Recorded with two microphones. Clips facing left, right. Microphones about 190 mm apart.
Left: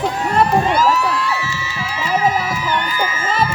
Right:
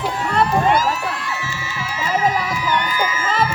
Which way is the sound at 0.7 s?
50° right (ahead or behind).